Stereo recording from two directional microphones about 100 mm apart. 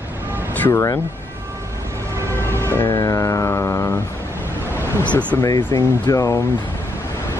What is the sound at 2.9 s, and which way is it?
Music, 35° left (ahead or behind).